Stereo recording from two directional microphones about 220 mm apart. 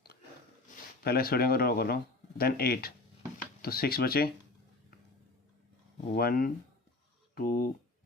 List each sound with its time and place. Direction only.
1.0 s speech: 45° left (ahead or behind)
6.1 s speech: 40° left (ahead or behind)